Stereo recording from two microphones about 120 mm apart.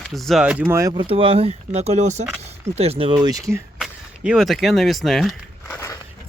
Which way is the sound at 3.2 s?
30° right (ahead or behind).